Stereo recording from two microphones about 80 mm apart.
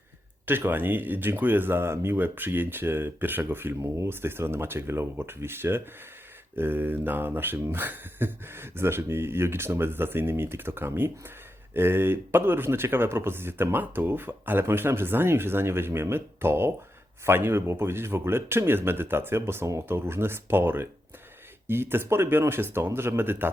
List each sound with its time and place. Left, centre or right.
0.4 s speech: right